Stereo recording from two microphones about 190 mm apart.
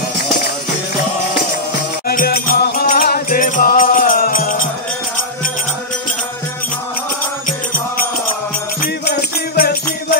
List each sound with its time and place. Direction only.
2.0 s music: 50° left (ahead or behind)
9.6 s music: 50° left (ahead or behind)